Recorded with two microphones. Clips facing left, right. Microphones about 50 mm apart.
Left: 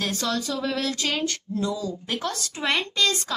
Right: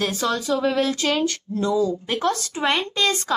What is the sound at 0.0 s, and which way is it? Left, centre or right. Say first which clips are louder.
Speech: right 4 dB; centre.